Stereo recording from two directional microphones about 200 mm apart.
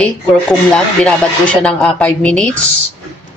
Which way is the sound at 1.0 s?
5° left (ahead or behind).